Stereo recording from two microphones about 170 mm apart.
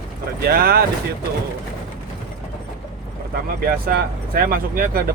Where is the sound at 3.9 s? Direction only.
60° right (ahead or behind).